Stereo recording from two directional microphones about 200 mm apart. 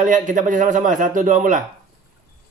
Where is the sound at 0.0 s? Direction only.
40° right (ahead or behind).